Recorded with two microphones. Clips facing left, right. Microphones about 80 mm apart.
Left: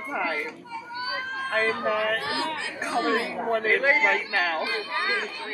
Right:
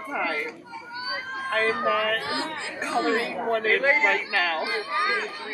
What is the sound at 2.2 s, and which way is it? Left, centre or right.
Speech, right.